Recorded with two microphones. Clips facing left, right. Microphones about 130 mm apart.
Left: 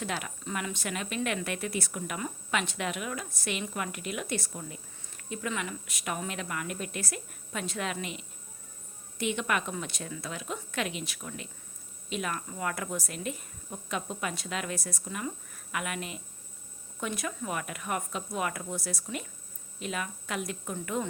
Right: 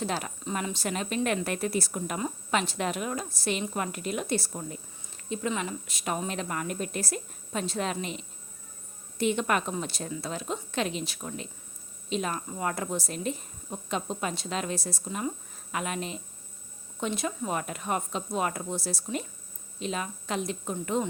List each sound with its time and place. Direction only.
0.0 s speech: 35° right (ahead or behind)
9.1 s a woman's voice: 35° right (ahead or behind)